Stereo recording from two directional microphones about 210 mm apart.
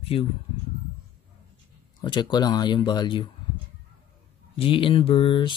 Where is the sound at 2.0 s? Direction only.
20° left (ahead or behind).